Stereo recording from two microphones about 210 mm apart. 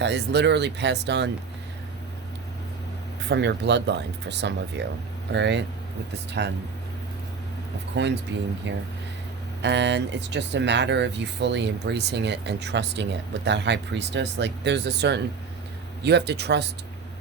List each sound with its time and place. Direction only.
0.0 s speech: 55° right (ahead or behind)
3.2 s speech: 55° right (ahead or behind)
8.3 s speech: 55° right (ahead or behind)